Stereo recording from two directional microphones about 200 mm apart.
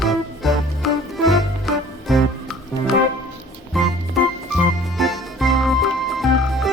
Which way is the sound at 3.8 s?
Centre (ahead or behind).